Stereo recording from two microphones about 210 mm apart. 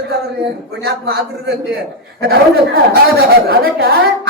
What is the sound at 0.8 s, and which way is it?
Speech, 50° right (ahead or behind).